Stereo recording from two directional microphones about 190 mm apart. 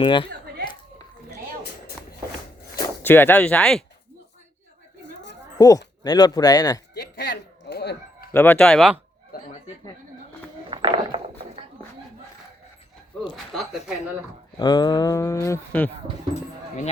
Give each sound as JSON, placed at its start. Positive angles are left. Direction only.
{"t": 0.0, "sound": "speech", "side_deg": 25}
{"t": 2.7, "sound": "speech", "side_deg": 15}
{"t": 5.5, "sound": "speech", "side_deg": 20}
{"t": 6.9, "sound": "a sound", "side_deg": 60}
{"t": 8.3, "sound": "speech", "side_deg": 10}
{"t": 9.3, "sound": "speech", "side_deg": 55}
{"t": 10.7, "sound": "a sound", "side_deg": -25}
{"t": 13.3, "sound": "speech", "side_deg": 0}
{"t": 14.6, "sound": "speech", "side_deg": 20}